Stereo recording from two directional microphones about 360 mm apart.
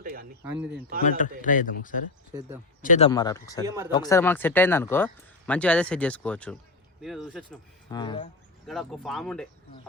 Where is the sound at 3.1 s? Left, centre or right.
Centre.